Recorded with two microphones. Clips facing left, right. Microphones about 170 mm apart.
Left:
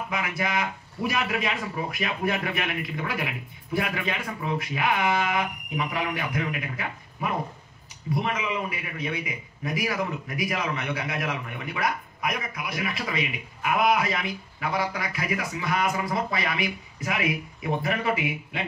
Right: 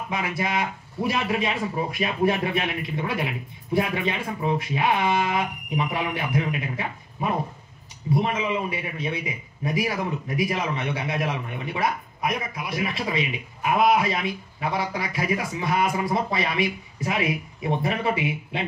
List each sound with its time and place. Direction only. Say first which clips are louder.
0.1 s a man's voice: right 3 dB; 25° right (ahead or behind)